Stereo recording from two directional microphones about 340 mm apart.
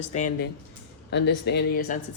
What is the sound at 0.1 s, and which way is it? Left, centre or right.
Speech, left.